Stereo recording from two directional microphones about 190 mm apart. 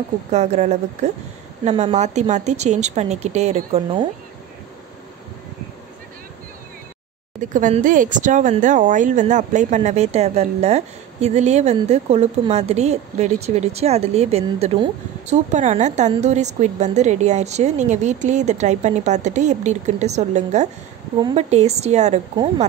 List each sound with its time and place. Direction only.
0.3 s speech: 35° right (ahead or behind)
7.3 s speech: 40° right (ahead or behind)